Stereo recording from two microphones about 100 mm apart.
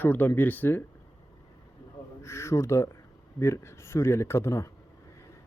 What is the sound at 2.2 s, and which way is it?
Speech, 25° left (ahead or behind).